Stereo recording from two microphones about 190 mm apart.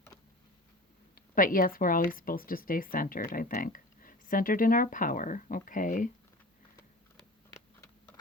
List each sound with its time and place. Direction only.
1.1 s speech: 45° left (ahead or behind)